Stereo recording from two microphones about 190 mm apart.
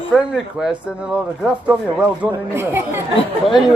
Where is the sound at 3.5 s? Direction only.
Centre (ahead or behind).